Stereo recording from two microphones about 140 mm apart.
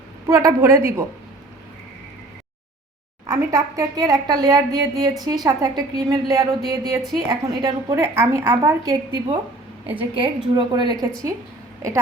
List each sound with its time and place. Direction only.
0.3 s a woman's voice: 25° right (ahead or behind)
3.2 s a woman's voice: 25° right (ahead or behind)